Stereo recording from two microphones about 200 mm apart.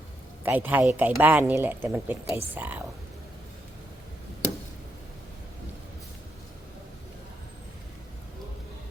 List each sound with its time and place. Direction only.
0.4 s a woman's voice: 10° right (ahead or behind)